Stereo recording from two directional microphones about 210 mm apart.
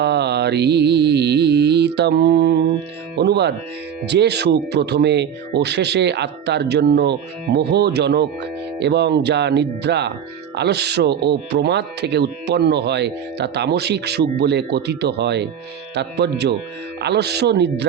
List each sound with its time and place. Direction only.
0.0 s speech: 50° right (ahead or behind)